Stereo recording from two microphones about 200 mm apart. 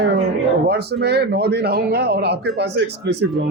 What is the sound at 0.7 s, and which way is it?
Speech, 55° right (ahead or behind).